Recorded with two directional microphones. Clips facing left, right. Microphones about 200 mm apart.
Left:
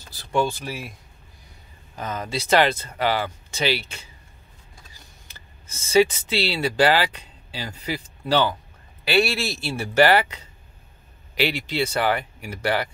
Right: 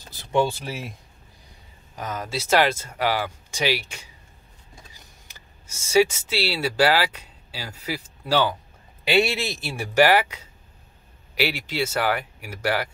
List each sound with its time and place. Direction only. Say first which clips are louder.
0.0 s speech: right 1 dB; 20° right (ahead or behind)
2.0 s speech: left 1 dB; 10° right (ahead or behind)
9.0 s speech: even; 20° right (ahead or behind)